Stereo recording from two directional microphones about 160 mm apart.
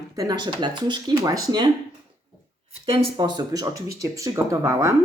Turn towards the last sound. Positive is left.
turn(degrees=-20)  # may be behind; listen again after turning